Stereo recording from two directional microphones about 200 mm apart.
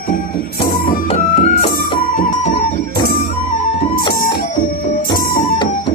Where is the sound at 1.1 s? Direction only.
35° left (ahead or behind).